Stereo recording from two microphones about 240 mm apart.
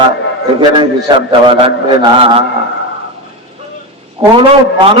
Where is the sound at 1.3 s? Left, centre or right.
Right.